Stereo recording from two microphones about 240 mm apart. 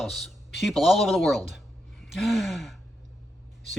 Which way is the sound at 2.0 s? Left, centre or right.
Centre.